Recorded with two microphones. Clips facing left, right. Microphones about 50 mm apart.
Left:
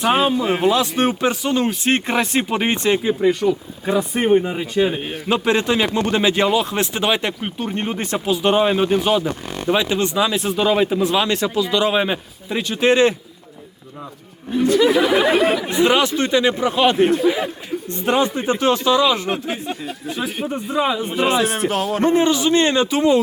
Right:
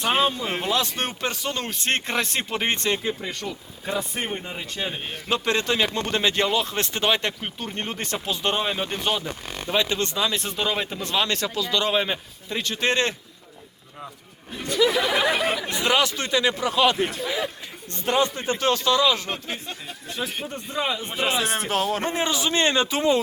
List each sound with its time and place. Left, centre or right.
0.0 s speech: centre
14.5 s a man's voice: centre
15.7 s speech: centre
17.2 s a man's voice: centre
22.4 s speech: left